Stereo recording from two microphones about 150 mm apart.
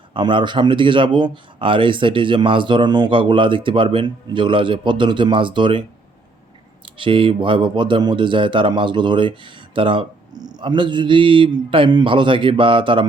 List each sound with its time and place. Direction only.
0.1 s speech: 35° right (ahead or behind)
6.9 s speech: 35° right (ahead or behind)